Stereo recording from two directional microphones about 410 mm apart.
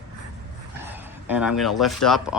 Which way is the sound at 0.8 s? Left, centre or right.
Centre.